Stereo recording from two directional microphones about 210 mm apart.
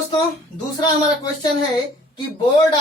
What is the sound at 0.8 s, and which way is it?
Speech, 20° left (ahead or behind).